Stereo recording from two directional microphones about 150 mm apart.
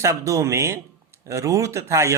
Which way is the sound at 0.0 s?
20° right (ahead or behind).